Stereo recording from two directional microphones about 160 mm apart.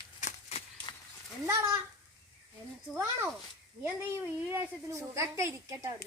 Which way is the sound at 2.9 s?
15° right (ahead or behind).